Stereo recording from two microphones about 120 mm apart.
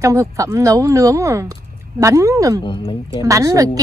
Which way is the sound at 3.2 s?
25° right (ahead or behind).